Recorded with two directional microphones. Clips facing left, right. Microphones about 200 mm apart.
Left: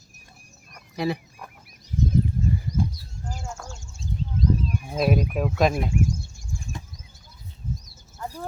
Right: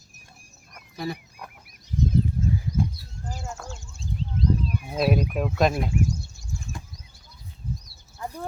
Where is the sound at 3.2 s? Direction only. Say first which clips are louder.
Even; centre (ahead or behind).